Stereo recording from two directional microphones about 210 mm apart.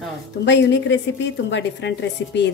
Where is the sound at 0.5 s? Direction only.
55° left (ahead or behind).